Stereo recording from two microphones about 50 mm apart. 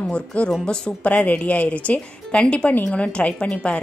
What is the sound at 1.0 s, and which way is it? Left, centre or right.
A woman's voice, left.